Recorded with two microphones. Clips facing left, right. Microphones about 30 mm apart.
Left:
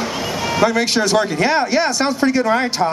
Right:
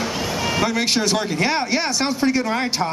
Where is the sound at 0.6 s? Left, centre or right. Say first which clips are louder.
Left 6 dB; centre.